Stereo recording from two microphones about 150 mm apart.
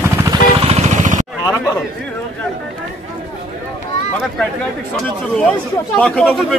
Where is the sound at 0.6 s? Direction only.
45° right (ahead or behind).